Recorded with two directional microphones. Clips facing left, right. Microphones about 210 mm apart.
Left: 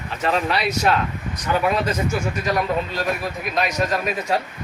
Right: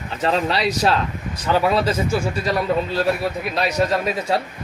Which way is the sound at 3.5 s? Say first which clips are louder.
Right 1 dB; 30° right (ahead or behind).